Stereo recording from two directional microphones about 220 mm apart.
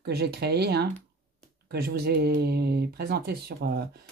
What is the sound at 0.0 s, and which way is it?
Speech, 45° right (ahead or behind).